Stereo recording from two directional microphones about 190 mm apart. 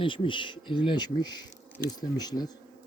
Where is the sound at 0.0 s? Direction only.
25° left (ahead or behind).